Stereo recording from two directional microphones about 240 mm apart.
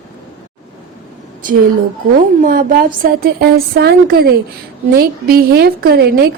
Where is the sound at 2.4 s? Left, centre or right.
Right.